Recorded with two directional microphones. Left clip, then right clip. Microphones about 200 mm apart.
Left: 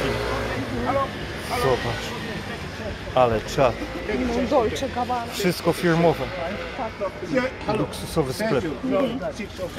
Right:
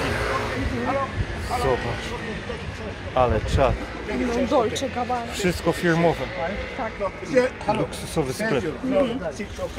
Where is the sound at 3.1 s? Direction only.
10° left (ahead or behind).